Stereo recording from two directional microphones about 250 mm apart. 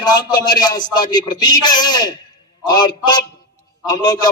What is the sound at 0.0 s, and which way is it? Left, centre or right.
A man's voice, centre.